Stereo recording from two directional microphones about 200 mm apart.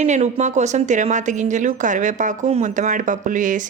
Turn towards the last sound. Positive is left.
turn(degrees=-40)  # may be behind; listen again after turning